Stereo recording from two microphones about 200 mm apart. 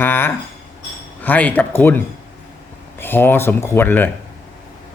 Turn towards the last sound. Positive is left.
turn(degrees=10)  # may be behind; listen again after turning